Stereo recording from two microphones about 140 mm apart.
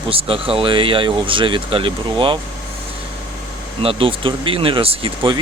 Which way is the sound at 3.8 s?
40° right (ahead or behind).